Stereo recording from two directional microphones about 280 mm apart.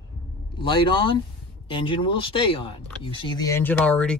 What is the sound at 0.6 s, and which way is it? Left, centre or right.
Speech, centre.